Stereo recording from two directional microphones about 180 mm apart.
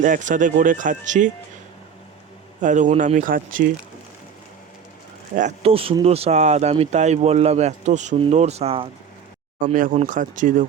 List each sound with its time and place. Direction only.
0.0 s speech: 45° right (ahead or behind)
2.6 s speech: 45° right (ahead or behind)
5.3 s speech: 40° right (ahead or behind)
9.6 s speech: 45° right (ahead or behind)